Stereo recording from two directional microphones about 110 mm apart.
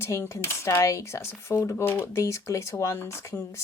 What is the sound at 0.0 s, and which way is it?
Speech, 25° left (ahead or behind).